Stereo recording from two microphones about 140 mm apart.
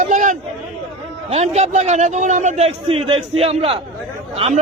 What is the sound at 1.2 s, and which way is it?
A man's voice, 50° right (ahead or behind).